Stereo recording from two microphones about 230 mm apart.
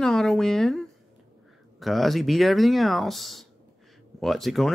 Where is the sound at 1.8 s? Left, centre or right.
Centre.